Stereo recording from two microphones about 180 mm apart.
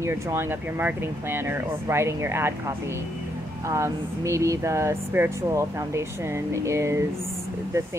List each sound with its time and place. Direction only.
0.0 s speech: 15° right (ahead or behind)
3.6 s speech: 15° right (ahead or behind)